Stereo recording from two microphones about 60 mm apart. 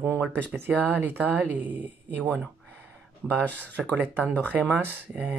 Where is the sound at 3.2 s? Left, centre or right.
Centre.